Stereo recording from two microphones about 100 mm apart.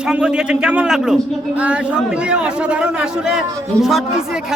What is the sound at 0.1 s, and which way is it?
Speech, 10° right (ahead or behind).